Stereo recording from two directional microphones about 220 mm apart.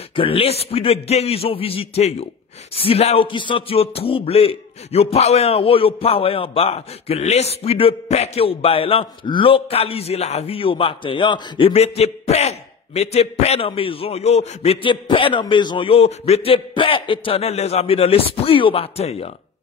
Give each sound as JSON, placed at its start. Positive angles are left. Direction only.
{"t": 0.1, "sound": "speech", "side_deg": 25}